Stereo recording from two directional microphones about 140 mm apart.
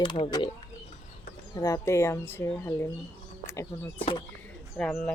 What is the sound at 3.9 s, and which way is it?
Speech, 40° left (ahead or behind).